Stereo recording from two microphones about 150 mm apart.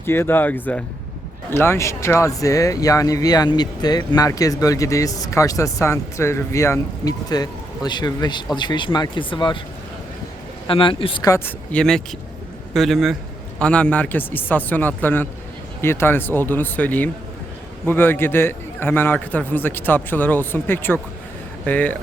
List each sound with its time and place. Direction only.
0.0 s a man's voice: 15° left (ahead or behind); by 9.6 s 30° left (ahead or behind)
10.7 s speech: 35° left (ahead or behind)
11.3 s a man's voice: 15° left (ahead or behind)